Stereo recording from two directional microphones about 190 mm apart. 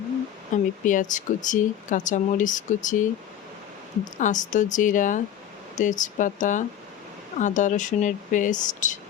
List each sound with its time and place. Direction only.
0.5 s speech: 45° left (ahead or behind)
4.2 s speech: 40° left (ahead or behind)